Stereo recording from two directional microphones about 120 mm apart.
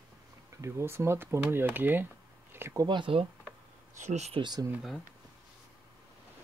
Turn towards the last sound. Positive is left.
turn(degrees=-35)  # may be behind; listen again after turning